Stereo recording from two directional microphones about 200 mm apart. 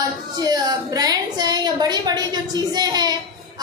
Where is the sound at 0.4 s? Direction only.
20° right (ahead or behind).